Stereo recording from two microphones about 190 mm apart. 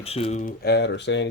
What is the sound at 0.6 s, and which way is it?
Speech, 60° left (ahead or behind).